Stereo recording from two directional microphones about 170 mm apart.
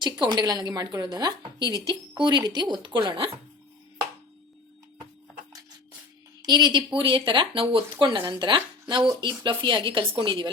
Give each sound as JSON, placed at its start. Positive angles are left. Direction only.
{"t": 0.0, "sound": "speech", "side_deg": -25}
{"t": 6.4, "sound": "speech", "side_deg": -25}